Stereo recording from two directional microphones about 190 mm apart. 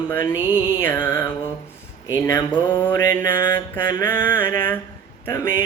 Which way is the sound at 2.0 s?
15° left (ahead or behind).